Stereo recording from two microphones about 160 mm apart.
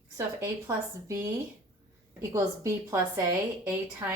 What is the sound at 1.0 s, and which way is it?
Speech, 20° right (ahead or behind).